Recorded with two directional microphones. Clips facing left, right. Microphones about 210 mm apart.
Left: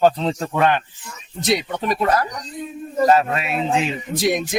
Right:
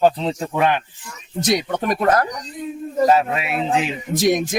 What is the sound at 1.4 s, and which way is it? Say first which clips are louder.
Speech: right 1 dB; 50° right (ahead or behind).